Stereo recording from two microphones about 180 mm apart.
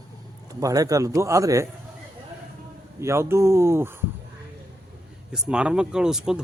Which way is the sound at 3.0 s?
15° right (ahead or behind).